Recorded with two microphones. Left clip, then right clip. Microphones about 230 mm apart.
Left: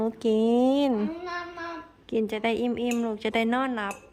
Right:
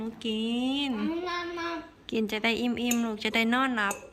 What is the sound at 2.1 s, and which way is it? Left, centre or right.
Speech, centre.